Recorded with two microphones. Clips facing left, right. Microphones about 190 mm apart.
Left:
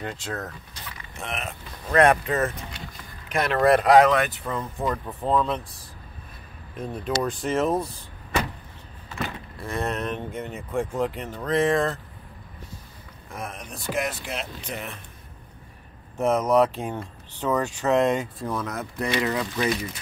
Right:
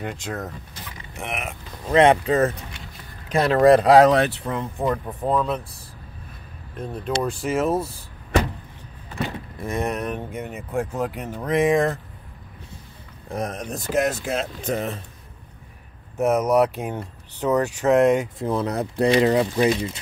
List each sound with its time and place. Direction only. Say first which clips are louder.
0.0 s speech: right 2 dB; 15° right (ahead or behind); by 4.5 s 30° right (ahead or behind)
4.5 s speech: right 3 dB; 20° right (ahead or behind)
7.2 s speech: right 2 dB; 5° right (ahead or behind)
9.2 s speech: right 4 dB; 20° right (ahead or behind)
13.3 s speech: right 8 dB; 40° right (ahead or behind)
16.3 s speech: even; 15° right (ahead or behind)
18.5 s speech: right 8 dB; 30° right (ahead or behind)